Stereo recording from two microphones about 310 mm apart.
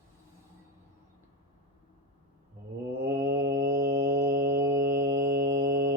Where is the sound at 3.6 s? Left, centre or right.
Centre.